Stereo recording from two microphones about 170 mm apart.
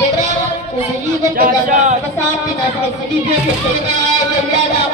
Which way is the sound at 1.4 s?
50° right (ahead or behind).